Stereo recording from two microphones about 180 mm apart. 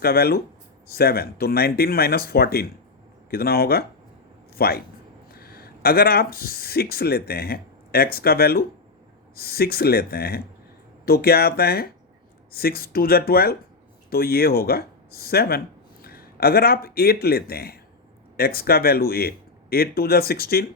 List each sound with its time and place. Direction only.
0.0 s speech: 60° left (ahead or behind)